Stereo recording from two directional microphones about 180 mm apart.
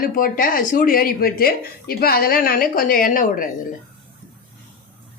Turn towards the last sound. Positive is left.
turn(degrees=50)  # may be behind; listen again after turning